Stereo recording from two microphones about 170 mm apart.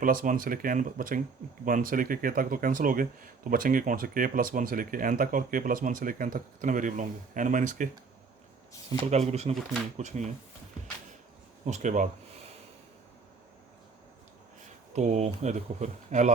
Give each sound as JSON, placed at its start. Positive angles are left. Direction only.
{"t": 0.0, "sound": "speech", "side_deg": -55}
{"t": 9.0, "sound": "speech", "side_deg": -40}
{"t": 11.6, "sound": "speech", "side_deg": -45}
{"t": 14.9, "sound": "speech", "side_deg": -45}